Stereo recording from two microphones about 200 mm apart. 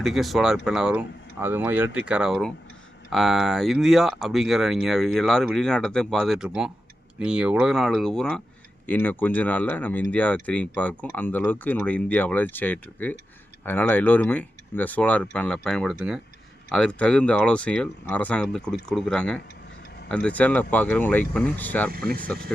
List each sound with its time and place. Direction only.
0.0 s speech: centre (ahead or behind)
21.9 s speech: 50° right (ahead or behind)